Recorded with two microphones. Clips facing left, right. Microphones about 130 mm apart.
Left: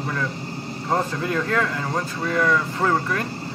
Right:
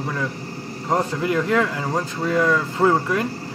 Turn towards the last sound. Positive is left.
turn(degrees=-15)  # may be behind; listen again after turning